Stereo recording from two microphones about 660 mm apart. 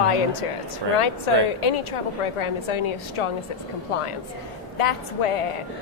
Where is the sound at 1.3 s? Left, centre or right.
Left.